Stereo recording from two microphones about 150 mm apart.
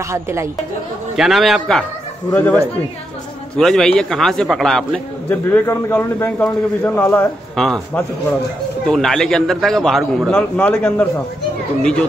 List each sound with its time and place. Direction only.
0.0 s speech: 20° right (ahead or behind)
1.1 s a man's voice: centre (ahead or behind)
2.3 s a man's voice: 15° left (ahead or behind)
3.5 s a man's voice: 5° left (ahead or behind)
5.3 s a man's voice: 15° left (ahead or behind)
7.5 s a man's voice: 5° left (ahead or behind)